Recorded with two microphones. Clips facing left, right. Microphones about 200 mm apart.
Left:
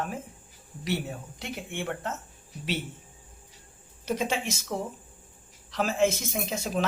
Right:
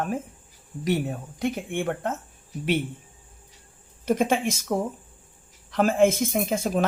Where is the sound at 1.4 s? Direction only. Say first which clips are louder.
Right 9 dB; 50° right (ahead or behind).